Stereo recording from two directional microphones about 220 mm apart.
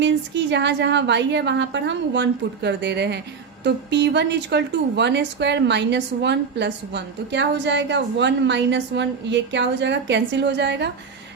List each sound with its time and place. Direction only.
0.0 s speech: 55° right (ahead or behind)